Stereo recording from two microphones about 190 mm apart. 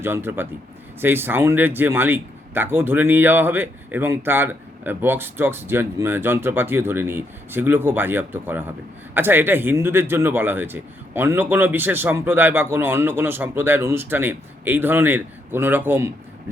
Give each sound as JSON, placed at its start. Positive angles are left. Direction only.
{"t": 0.0, "sound": "speech", "side_deg": -10}